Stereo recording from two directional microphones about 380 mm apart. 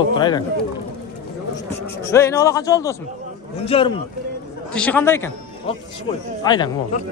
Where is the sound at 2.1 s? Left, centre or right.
Centre.